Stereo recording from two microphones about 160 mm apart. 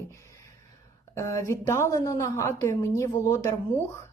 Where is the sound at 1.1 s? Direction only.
20° left (ahead or behind).